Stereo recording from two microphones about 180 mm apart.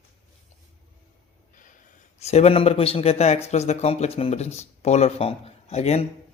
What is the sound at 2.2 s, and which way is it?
Speech, 35° left (ahead or behind).